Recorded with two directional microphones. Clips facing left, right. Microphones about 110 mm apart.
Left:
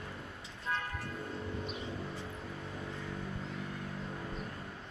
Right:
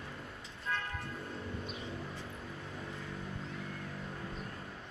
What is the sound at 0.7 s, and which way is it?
Vehicle, 15° left (ahead or behind).